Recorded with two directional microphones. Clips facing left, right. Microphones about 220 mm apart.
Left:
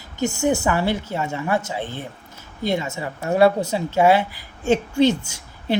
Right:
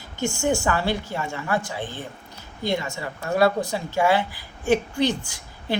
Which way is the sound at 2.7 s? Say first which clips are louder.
Left 3 dB; 20° left (ahead or behind).